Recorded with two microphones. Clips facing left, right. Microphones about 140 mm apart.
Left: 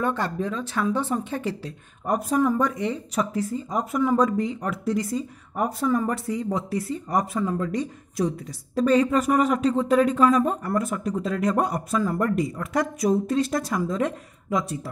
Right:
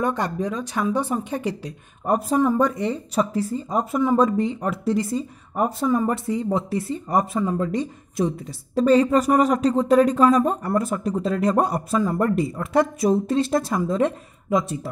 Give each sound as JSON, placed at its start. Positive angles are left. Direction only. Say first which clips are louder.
{"t": 0.0, "sound": "speech", "louder": "right 2 dB", "side_deg": -15}
{"t": 2.0, "sound": "speech", "louder": "right 2 dB", "side_deg": -30}